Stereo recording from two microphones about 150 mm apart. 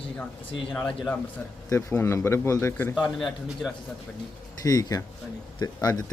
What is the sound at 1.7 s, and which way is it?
A man's voice, 15° left (ahead or behind).